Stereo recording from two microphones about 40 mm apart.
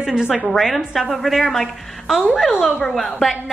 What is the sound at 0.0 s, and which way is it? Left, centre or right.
Speech, centre.